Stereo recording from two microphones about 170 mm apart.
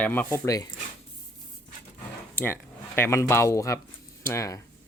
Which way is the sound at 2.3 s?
15° left (ahead or behind).